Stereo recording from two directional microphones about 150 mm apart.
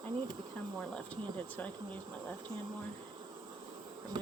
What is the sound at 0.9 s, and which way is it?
Speech, 10° left (ahead or behind).